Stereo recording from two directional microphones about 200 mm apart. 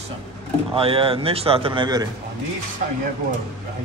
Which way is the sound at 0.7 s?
25° right (ahead or behind).